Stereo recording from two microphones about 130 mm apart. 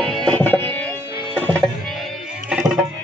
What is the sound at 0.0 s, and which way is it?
Music, 5° left (ahead or behind).